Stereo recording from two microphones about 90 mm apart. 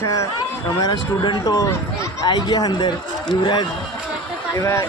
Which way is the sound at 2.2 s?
50° left (ahead or behind).